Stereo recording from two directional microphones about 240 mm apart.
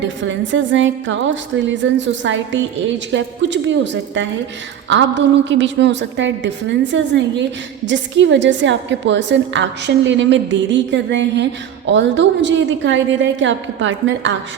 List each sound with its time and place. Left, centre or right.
0.0 s music: right